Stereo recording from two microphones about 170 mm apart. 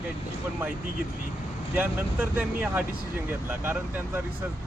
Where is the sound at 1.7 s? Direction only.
10° right (ahead or behind).